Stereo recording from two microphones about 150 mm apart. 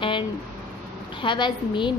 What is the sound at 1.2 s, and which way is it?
Speech, 30° left (ahead or behind).